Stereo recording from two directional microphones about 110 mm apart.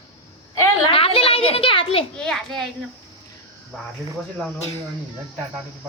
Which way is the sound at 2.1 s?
5° left (ahead or behind).